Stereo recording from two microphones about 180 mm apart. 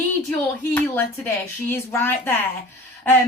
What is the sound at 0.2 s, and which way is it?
Speech, 5° left (ahead or behind).